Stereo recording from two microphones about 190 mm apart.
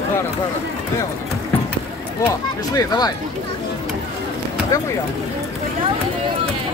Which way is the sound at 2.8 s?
20° left (ahead or behind).